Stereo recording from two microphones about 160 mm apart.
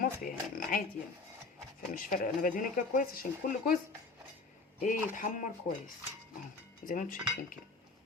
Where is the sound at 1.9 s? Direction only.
60° left (ahead or behind).